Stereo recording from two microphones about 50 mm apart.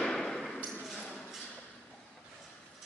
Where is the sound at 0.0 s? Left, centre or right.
Centre.